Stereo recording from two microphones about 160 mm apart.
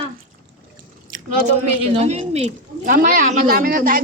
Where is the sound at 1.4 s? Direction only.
45° right (ahead or behind).